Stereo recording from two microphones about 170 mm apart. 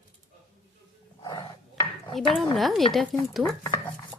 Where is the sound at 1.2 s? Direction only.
25° left (ahead or behind).